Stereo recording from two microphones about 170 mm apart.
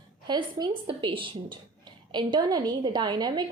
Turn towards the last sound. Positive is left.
turn(degrees=-25)  # may be behind; listen again after turning